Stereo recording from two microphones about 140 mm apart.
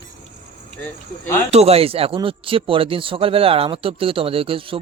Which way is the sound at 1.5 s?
45° right (ahead or behind).